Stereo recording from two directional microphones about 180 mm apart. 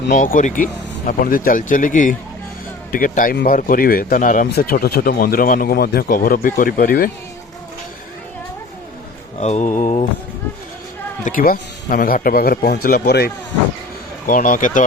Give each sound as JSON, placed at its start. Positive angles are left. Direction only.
{"t": 0.1, "sound": "speech", "side_deg": 45}
{"t": 4.4, "sound": "speech", "side_deg": 60}
{"t": 9.4, "sound": "mantra", "side_deg": 40}
{"t": 11.2, "sound": "speech", "side_deg": 50}
{"t": 14.3, "sound": "speech", "side_deg": 50}